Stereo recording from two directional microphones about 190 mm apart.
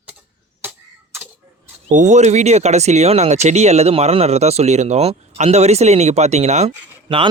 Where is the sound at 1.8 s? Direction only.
40° right (ahead or behind).